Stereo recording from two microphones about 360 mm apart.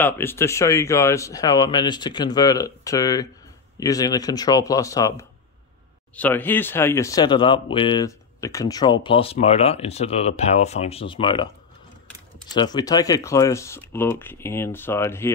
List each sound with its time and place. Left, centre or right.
0.0 s speech: centre
12.5 s speech: centre